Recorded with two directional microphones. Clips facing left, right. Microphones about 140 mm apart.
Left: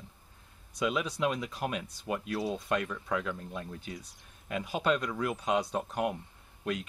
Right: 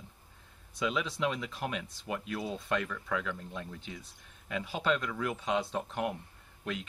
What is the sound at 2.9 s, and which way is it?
Speech, 30° left (ahead or behind).